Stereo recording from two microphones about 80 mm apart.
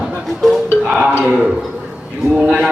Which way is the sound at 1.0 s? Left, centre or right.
Centre.